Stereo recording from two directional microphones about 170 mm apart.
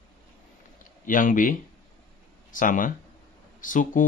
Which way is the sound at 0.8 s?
50° left (ahead or behind).